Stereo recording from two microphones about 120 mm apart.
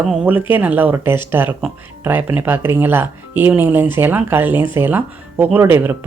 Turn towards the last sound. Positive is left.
turn(degrees=-15)  # may be behind; listen again after turning